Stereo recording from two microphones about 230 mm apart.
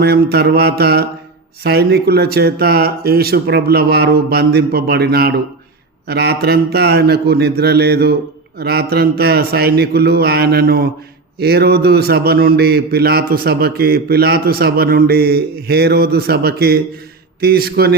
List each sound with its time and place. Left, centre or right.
0.0 s a man's voice: right